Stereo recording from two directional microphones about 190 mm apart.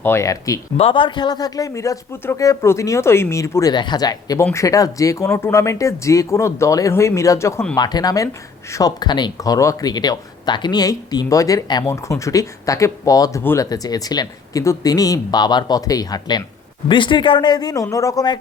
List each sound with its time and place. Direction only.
0.0 s speech: 15° left (ahead or behind)
0.8 s speech: 25° left (ahead or behind)